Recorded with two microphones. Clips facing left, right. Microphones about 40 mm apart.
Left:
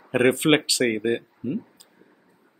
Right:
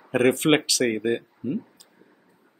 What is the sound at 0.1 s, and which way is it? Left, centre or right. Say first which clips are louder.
Speech: left 1 dB; left.